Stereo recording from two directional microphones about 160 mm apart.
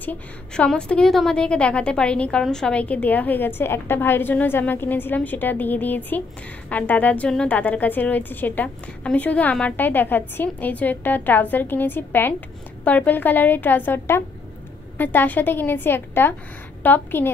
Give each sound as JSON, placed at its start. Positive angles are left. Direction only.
{"t": 0.0, "sound": "a woman's voice", "side_deg": 10}